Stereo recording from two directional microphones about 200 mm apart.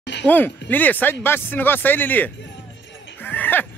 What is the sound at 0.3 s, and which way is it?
Speech, 10° left (ahead or behind).